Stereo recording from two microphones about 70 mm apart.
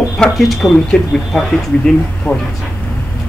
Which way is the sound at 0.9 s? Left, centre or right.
Centre.